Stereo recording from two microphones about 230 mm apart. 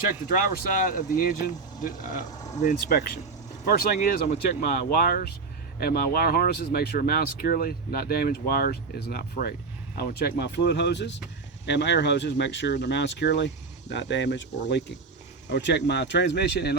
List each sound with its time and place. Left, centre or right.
0.9 s speech: left